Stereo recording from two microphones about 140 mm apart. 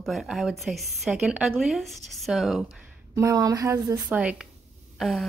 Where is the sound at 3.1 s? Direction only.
20° right (ahead or behind).